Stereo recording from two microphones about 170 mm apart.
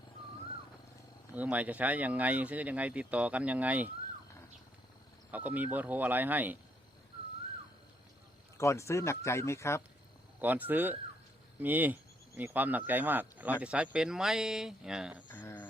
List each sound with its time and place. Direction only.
1.4 s speech: 10° right (ahead or behind)
5.3 s speech: 10° right (ahead or behind)
8.5 s speech: 15° left (ahead or behind)
10.4 s speech: 10° right (ahead or behind)
15.3 s a sound: 10° left (ahead or behind)